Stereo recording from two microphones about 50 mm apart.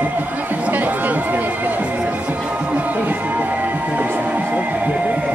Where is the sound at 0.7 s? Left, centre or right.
Right.